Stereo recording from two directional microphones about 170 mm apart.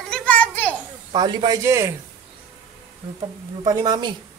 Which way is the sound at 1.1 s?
25° right (ahead or behind).